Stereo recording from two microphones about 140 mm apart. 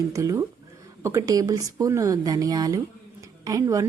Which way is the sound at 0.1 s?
25° right (ahead or behind).